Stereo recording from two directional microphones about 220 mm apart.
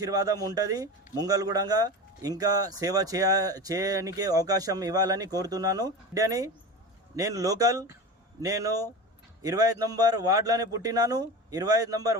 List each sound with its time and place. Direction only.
0.0 s a man's voice: 15° right (ahead or behind)